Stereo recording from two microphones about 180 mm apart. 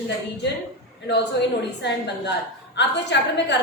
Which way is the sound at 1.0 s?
70° left (ahead or behind).